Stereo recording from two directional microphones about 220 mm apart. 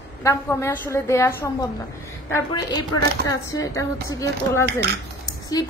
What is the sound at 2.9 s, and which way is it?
A woman's voice, 15° left (ahead or behind).